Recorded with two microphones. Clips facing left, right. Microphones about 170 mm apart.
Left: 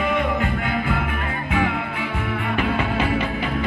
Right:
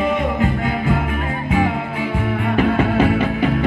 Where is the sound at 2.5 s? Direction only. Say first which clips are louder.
Right 7 dB; 45° right (ahead or behind).